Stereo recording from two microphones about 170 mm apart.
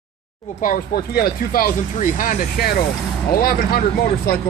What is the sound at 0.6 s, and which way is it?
Speech, 55° left (ahead or behind).